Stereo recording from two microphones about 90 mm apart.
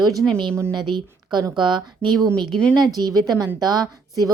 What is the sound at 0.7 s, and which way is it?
A woman's voice, 60° right (ahead or behind).